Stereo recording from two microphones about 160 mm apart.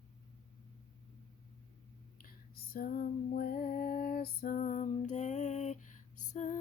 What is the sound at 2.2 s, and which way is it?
Female singing, 65° left (ahead or behind).